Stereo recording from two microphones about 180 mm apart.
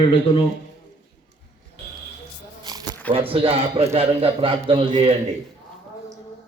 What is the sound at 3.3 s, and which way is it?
A man's voice, 30° right (ahead or behind).